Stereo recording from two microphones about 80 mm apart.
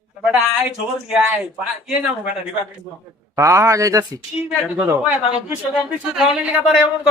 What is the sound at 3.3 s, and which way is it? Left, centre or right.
Speech, right.